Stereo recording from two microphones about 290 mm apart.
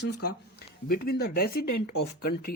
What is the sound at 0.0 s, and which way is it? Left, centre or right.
Speech, left.